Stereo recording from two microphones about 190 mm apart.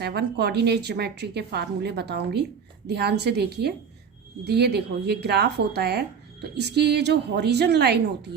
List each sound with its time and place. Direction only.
0.0 s a woman's voice: 60° right (ahead or behind)